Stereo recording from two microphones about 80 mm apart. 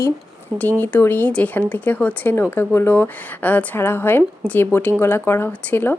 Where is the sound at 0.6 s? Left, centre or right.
Left.